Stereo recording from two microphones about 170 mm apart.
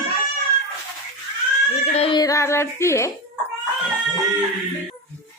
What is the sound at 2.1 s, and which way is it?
Speech, 20° left (ahead or behind).